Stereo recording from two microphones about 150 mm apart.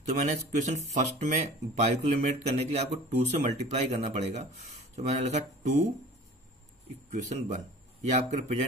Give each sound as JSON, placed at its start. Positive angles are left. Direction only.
{"t": 0.1, "sound": "speech", "side_deg": -55}
{"t": 7.1, "sound": "a man's voice", "side_deg": -55}